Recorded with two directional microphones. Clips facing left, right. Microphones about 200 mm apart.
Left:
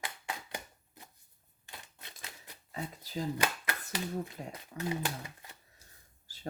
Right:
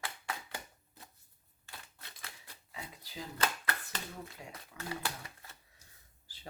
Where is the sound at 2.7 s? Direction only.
45° left (ahead or behind).